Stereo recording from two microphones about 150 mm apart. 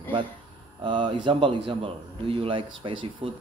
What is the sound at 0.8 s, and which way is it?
A man's voice, 30° right (ahead or behind).